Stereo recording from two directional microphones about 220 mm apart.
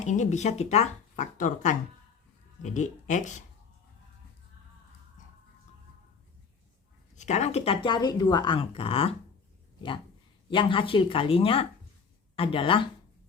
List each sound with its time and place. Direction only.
0.0 s speech: 35° left (ahead or behind)
7.2 s speech: 30° left (ahead or behind)
10.5 s speech: 20° left (ahead or behind)